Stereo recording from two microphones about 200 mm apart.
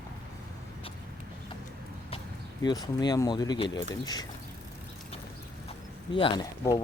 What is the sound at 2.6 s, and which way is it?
Speech, 20° left (ahead or behind).